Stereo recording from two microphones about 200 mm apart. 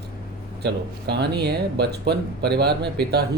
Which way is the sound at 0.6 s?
55° right (ahead or behind).